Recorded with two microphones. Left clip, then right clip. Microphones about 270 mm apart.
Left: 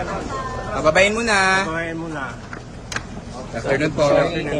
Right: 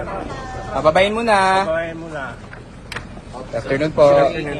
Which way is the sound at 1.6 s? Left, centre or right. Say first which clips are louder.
Right 3 dB; centre.